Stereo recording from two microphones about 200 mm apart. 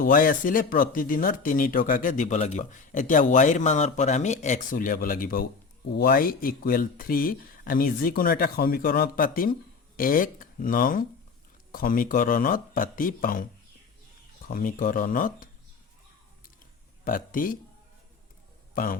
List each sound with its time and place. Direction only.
0.0 s speech: 45° left (ahead or behind)
14.4 s speech: 45° left (ahead or behind)
17.0 s speech: 45° left (ahead or behind)
18.7 s speech: 45° left (ahead or behind)